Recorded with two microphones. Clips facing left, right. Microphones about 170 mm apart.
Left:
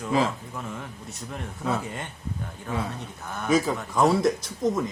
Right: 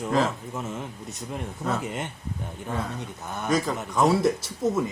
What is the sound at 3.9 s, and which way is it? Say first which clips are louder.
Speech: even; centre (ahead or behind).